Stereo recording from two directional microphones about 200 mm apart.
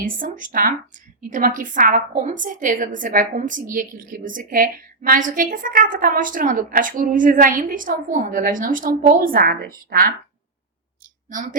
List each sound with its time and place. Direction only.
0.0 s a woman's voice: 40° right (ahead or behind)